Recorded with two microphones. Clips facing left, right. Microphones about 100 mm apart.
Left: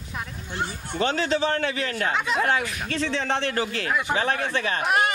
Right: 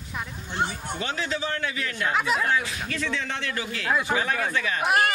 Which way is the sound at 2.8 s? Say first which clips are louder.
Left 3 dB; 35° left (ahead or behind).